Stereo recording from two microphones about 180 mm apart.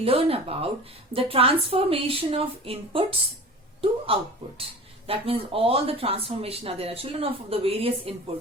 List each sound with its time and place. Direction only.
0.0 s speech: 30° right (ahead or behind)